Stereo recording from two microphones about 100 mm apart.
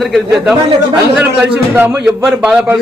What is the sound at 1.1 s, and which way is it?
A man's voice, 15° right (ahead or behind).